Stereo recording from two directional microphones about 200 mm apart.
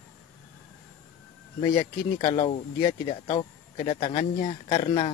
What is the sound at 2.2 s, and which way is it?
Speech, 30° left (ahead or behind).